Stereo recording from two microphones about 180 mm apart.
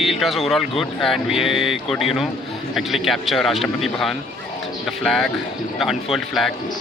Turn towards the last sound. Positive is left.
turn(degrees=0)  # may be behind; listen again after turning